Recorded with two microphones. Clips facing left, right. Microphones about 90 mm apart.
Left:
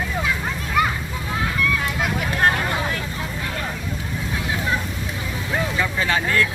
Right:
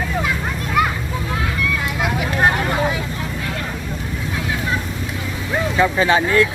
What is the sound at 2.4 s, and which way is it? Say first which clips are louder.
Vehicle: right 3 dB; 15° right (ahead or behind).